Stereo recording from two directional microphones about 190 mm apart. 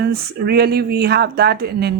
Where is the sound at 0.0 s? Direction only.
55° right (ahead or behind).